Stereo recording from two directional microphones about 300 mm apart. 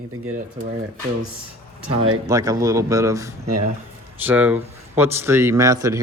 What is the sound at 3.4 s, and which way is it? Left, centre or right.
Speech, right.